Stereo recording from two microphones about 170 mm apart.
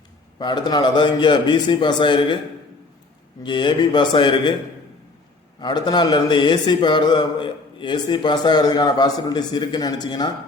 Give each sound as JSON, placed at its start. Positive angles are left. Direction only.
{"t": 0.3, "sound": "a man's voice", "side_deg": 25}
{"t": 3.4, "sound": "a man's voice", "side_deg": 25}
{"t": 5.5, "sound": "a man's voice", "side_deg": 25}